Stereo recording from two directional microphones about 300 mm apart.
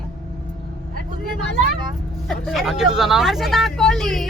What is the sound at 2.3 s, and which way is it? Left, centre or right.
Speech, centre.